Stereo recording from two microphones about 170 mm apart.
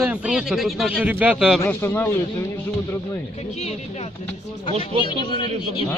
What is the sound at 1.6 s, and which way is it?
Speech, 15° left (ahead or behind).